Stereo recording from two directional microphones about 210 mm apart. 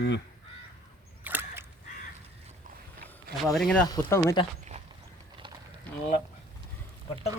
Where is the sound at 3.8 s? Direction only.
20° left (ahead or behind).